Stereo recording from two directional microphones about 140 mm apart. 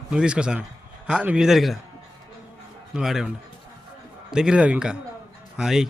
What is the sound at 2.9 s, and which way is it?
Speech, 5° right (ahead or behind).